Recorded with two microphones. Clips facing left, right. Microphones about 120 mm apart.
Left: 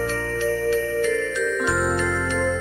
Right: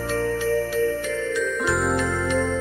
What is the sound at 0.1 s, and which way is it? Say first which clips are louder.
Music: right 2 dB; 15° right (ahead or behind).